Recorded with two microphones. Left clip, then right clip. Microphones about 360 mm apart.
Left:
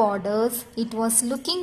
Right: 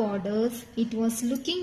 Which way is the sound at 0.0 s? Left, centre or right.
Left.